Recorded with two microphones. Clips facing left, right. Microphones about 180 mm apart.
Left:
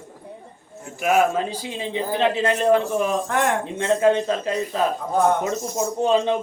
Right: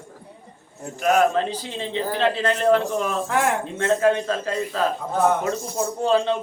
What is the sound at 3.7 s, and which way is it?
A man's voice, 20° left (ahead or behind).